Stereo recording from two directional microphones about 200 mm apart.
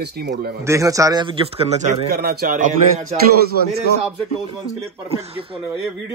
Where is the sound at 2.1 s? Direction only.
50° right (ahead or behind).